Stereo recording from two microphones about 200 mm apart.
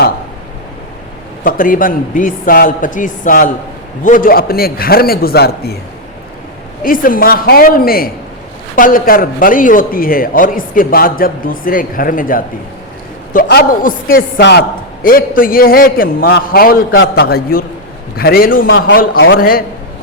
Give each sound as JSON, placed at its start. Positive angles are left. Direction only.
{"t": 1.5, "sound": "a man's voice", "side_deg": 45}
{"t": 6.8, "sound": "a man's voice", "side_deg": 45}
{"t": 19.1, "sound": "a man's voice", "side_deg": 70}
{"t": 19.4, "sound": "a man's voice", "side_deg": 45}